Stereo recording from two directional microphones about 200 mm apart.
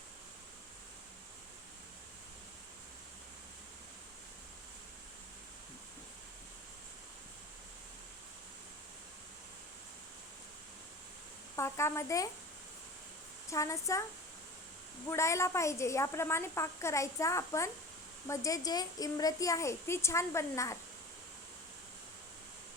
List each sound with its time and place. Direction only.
11.5 s a woman's voice: 15° left (ahead or behind)
13.5 s a woman's voice: 15° left (ahead or behind)
15.1 s a woman's voice: 15° left (ahead or behind)